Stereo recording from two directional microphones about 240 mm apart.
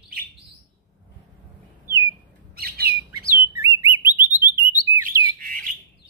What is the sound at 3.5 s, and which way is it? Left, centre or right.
Chirp, centre.